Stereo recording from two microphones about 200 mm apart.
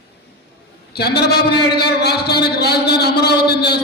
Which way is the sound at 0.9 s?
55° left (ahead or behind).